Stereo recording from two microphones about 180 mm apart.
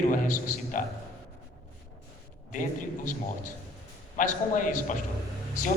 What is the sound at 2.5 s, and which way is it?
Speech, 45° left (ahead or behind).